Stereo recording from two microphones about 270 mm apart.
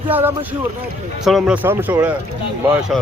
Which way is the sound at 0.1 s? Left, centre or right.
Centre.